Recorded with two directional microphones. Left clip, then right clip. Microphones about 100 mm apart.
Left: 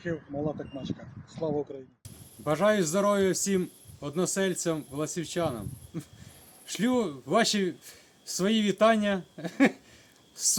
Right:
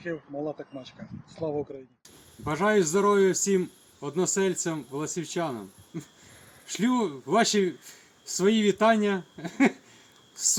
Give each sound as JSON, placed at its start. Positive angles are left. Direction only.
{"t": 0.0, "sound": "speech", "side_deg": 5}
{"t": 2.4, "sound": "speech", "side_deg": 25}